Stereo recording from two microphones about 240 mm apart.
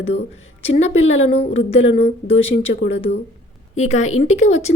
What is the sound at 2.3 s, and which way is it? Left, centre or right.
Speech, left.